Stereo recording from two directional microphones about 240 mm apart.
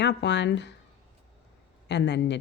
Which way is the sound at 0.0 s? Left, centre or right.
Left.